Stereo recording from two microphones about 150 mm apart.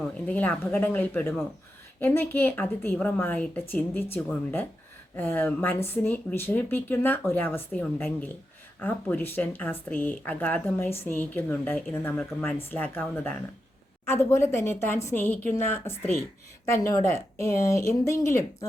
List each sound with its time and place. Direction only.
0.3 s speech: 10° left (ahead or behind)